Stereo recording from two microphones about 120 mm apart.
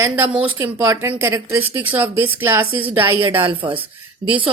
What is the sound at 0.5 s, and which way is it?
A woman's voice, 25° right (ahead or behind).